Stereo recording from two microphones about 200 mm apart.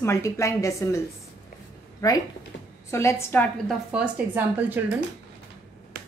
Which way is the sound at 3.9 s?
10° right (ahead or behind).